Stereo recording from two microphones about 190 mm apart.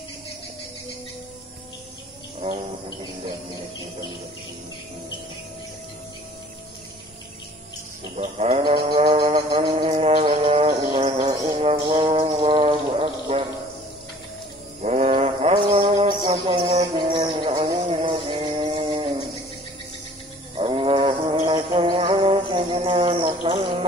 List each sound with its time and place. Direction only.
8.2 s livestock: 35° right (ahead or behind)
9.8 s music: 35° right (ahead or behind)
14.8 s mantra: 35° right (ahead or behind)
20.5 s music: 30° right (ahead or behind)